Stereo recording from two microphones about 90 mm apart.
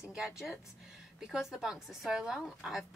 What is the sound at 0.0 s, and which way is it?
A woman's voice, 5° right (ahead or behind).